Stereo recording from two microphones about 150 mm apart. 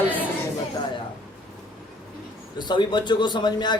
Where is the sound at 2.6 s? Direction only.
30° left (ahead or behind).